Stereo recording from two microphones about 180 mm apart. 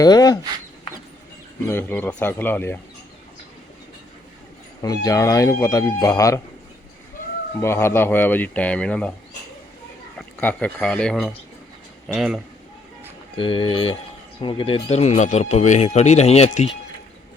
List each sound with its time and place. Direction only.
0.0 s speech: 20° left (ahead or behind)
1.6 s speech: 10° left (ahead or behind)
4.8 s speech: 20° left (ahead or behind)
7.6 s speech: 15° left (ahead or behind)
10.2 s speech: 5° left (ahead or behind)
13.3 s speech: 30° left (ahead or behind)